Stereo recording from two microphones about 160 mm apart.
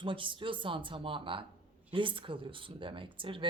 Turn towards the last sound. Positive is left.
turn(degrees=-35)  # may be behind; listen again after turning